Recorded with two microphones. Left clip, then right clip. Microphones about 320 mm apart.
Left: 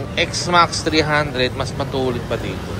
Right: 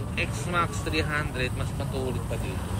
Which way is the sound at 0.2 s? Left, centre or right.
Centre.